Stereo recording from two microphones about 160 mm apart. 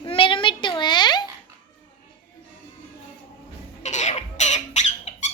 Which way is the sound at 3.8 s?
45° left (ahead or behind).